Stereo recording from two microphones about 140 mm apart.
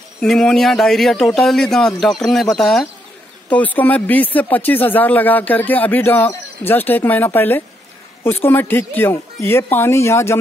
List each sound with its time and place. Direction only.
0.2 s a man's voice: 5° left (ahead or behind); by 10.3 s 20° left (ahead or behind)